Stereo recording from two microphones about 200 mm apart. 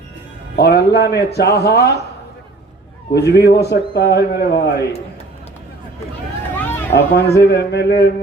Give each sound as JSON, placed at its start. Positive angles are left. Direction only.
{"t": 0.5, "sound": "a man's voice", "side_deg": 55}
{"t": 3.2, "sound": "a man's voice", "side_deg": 55}
{"t": 6.6, "sound": "a sound", "side_deg": 10}
{"t": 6.9, "sound": "a man's voice", "side_deg": 55}